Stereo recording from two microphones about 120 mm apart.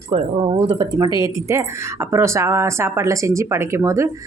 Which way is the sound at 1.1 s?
25° right (ahead or behind).